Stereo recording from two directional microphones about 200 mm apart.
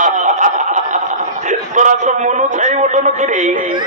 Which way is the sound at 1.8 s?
35° right (ahead or behind).